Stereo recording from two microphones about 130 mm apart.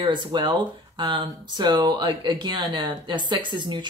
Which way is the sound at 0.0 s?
35° right (ahead or behind).